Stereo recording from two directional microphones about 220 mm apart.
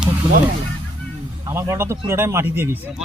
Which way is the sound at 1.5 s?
15° right (ahead or behind).